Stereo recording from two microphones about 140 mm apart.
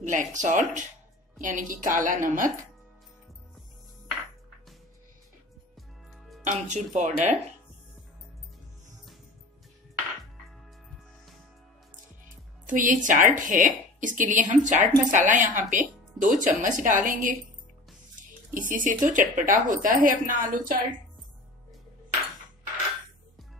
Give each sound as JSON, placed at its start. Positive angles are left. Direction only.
{"t": 0.0, "sound": "a woman's voice", "side_deg": -65}
{"t": 6.4, "sound": "speech", "side_deg": -60}
{"t": 12.6, "sound": "a woman's voice", "side_deg": -70}
{"t": 18.5, "sound": "a woman's voice", "side_deg": -75}